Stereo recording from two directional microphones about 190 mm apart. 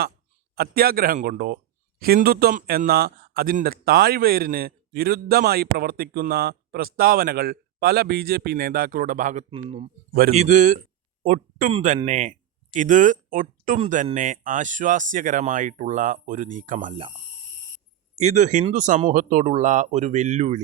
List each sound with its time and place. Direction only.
0.5 s a man's voice: 55° right (ahead or behind); by 9.9 s 30° right (ahead or behind)
10.1 s a man's voice: 50° right (ahead or behind)
10.3 s a man's voice: 40° right (ahead or behind)
18.2 s speech: 40° right (ahead or behind)